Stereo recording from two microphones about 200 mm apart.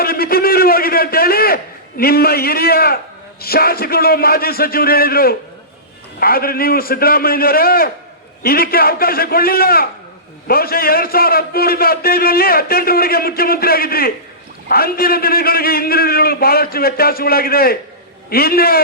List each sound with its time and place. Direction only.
0.0 s a man's voice: 50° left (ahead or behind)